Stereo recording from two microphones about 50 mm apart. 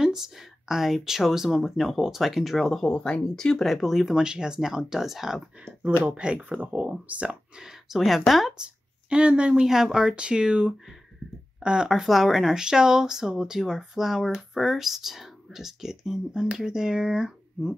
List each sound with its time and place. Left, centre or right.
0.0 s speech: centre
2.9 s speech: centre
3.6 s speech: centre
6.0 s speech: right
6.6 s speech: right
7.5 s speech: centre
8.6 s speech: centre